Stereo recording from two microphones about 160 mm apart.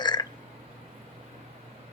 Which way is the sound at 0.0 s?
25° left (ahead or behind).